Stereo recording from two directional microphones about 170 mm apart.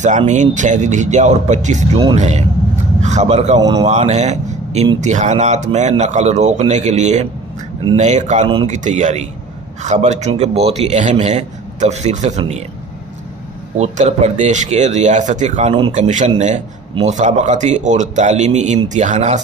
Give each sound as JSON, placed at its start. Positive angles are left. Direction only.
{"t": 0.3, "sound": "speech", "side_deg": -45}
{"t": 2.1, "sound": "a sound", "side_deg": -40}
{"t": 3.8, "sound": "a man's voice", "side_deg": -40}
{"t": 13.7, "sound": "speech", "side_deg": -40}